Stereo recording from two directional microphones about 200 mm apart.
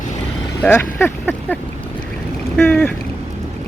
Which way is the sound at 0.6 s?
10° left (ahead or behind).